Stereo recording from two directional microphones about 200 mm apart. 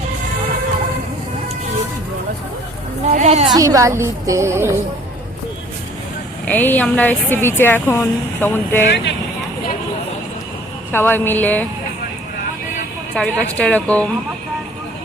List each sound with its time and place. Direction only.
3.1 s speech: 35° right (ahead or behind)
3.5 s a woman's voice: 15° right (ahead or behind)
6.5 s speech: 10° left (ahead or behind)
10.9 s speech: 10° left (ahead or behind)
13.1 s speech: 5° left (ahead or behind)